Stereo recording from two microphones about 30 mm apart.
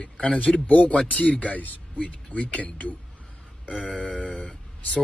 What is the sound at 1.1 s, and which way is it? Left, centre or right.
Speech, left.